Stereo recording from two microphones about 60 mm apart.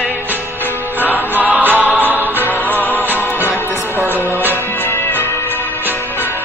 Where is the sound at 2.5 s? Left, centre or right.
Left.